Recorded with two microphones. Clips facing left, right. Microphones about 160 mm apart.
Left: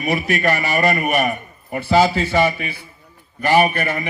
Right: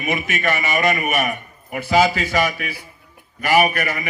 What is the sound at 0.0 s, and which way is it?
A man's voice, 35° left (ahead or behind).